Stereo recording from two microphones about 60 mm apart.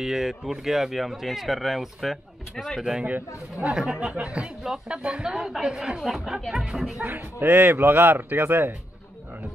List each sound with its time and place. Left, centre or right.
0.0 s speech: centre
2.8 s speech: centre
7.0 s speech: right